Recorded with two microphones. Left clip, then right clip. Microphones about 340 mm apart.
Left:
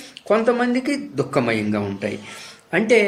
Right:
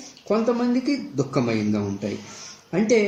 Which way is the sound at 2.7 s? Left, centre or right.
Left.